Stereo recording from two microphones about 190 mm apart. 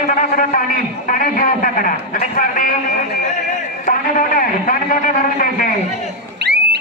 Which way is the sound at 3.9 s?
45° left (ahead or behind).